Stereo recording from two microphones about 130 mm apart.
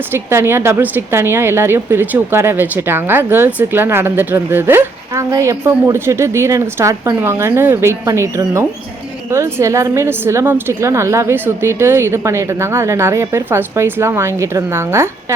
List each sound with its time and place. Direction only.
0.1 s a woman's voice: 20° right (ahead or behind)